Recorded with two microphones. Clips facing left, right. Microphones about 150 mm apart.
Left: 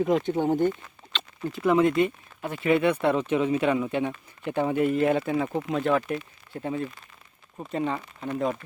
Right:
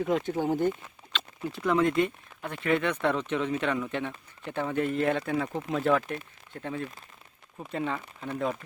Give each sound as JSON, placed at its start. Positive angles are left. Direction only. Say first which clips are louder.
{"t": 0.1, "sound": "speech", "louder": "left 4 dB", "side_deg": 0}
{"t": 0.3, "sound": "speech", "louder": "left 3 dB", "side_deg": 20}
{"t": 1.1, "sound": "speech", "louder": "left 2 dB", "side_deg": 0}